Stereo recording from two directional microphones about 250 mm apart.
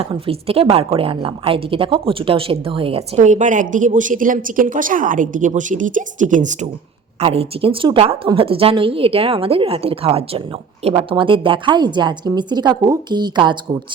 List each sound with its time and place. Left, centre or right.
0.0 s a woman's voice: right